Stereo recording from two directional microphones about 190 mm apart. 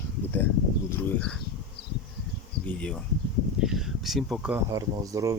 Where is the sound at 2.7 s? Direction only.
5° left (ahead or behind).